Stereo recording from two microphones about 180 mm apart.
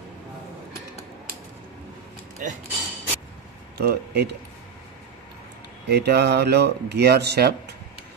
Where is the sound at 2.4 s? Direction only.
45° right (ahead or behind).